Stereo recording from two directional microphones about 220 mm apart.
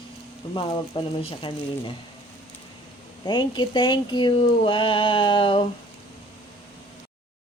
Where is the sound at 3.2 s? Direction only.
20° left (ahead or behind).